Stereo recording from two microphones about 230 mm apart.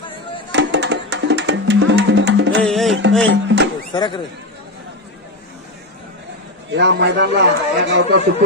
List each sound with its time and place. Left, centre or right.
0.5 s music: right
2.6 s music: centre
3.3 s music: right
3.9 s speech: centre
6.7 s speech: right